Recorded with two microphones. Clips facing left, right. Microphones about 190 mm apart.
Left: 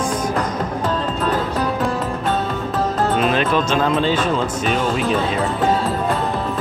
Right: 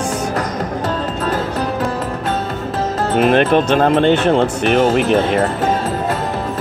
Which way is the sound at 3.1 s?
60° right (ahead or behind).